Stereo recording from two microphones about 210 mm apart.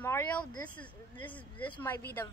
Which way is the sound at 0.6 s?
5° left (ahead or behind).